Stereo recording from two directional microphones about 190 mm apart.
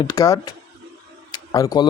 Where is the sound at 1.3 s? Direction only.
20° left (ahead or behind).